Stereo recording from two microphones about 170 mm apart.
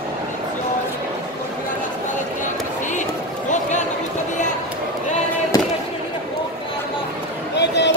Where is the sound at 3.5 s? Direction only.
45° left (ahead or behind).